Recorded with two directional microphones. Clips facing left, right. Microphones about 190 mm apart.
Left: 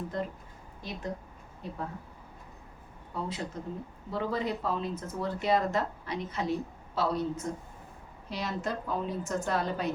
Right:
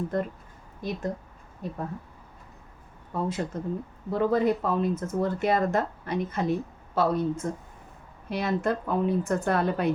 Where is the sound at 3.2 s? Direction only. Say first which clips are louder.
Right 6 dB; 50° right (ahead or behind).